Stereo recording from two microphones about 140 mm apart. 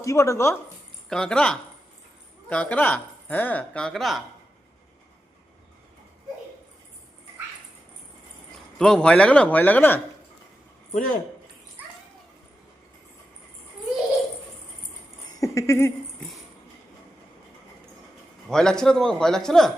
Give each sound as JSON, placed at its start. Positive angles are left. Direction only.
{"t": 0.0, "sound": "speech", "side_deg": 20}
{"t": 1.1, "sound": "a man's voice", "side_deg": 5}
{"t": 8.8, "sound": "a woman's voice", "side_deg": 5}
{"t": 10.9, "sound": "speech", "side_deg": 65}
{"t": 15.4, "sound": "a sound", "side_deg": 20}
{"t": 18.4, "sound": "a man's voice", "side_deg": 5}